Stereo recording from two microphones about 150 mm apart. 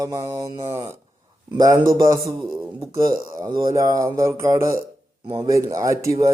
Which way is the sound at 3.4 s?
30° right (ahead or behind).